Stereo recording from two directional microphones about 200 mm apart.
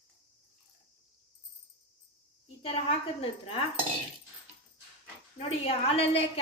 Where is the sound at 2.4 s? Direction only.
30° left (ahead or behind).